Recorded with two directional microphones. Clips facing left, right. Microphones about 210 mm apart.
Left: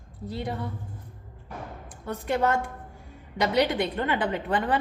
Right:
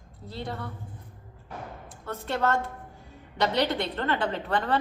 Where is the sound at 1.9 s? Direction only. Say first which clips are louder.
Left 4 dB; 15° left (ahead or behind).